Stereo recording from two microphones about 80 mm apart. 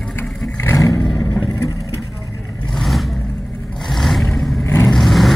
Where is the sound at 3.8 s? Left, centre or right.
Centre.